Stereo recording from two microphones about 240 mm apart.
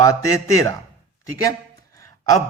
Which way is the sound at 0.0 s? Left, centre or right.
Centre.